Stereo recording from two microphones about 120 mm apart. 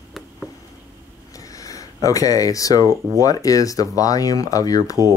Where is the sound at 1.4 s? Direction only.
30° left (ahead or behind).